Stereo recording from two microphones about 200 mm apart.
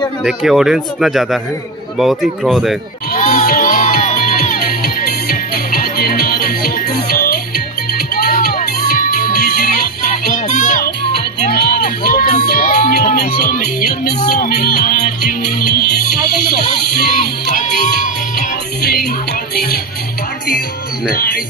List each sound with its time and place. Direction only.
0.2 s speech: centre (ahead or behind)
3.2 s music: 40° left (ahead or behind)
11.6 s a sound: 50° left (ahead or behind)
12.4 s music: 45° left (ahead or behind)
18.8 s music: 50° left (ahead or behind)
21.1 s speech: 45° left (ahead or behind)